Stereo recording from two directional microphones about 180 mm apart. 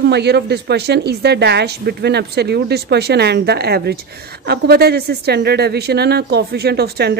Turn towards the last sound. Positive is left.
turn(degrees=-65)  # may be behind; listen again after turning